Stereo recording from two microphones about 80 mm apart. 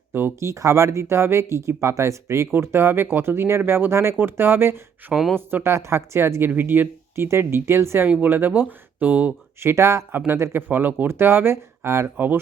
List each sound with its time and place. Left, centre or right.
0.1 s speech: right
0.3 s speech: right
8.0 s speech: right
9.6 s speech: right